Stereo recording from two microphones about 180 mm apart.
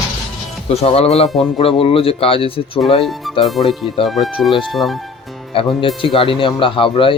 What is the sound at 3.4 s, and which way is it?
Speech, centre (ahead or behind).